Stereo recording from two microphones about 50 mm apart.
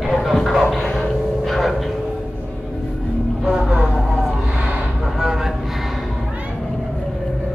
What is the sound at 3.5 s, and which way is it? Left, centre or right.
Vehicle, centre.